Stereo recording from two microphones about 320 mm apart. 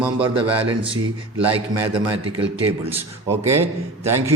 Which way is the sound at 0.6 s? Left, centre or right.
Centre.